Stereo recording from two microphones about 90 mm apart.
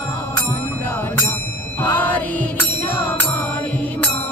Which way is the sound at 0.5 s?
25° left (ahead or behind).